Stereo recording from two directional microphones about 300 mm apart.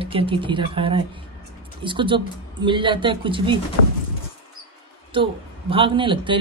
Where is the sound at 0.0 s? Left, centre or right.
Centre.